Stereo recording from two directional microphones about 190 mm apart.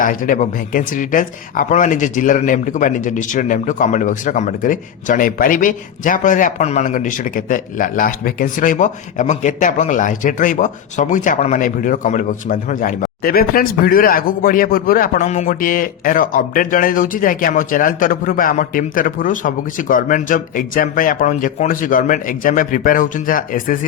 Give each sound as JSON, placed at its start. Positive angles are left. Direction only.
{"t": 0.0, "sound": "speech", "side_deg": 45}